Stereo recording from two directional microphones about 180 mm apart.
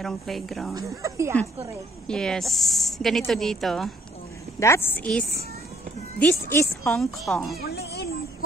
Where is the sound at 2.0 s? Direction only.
5° left (ahead or behind).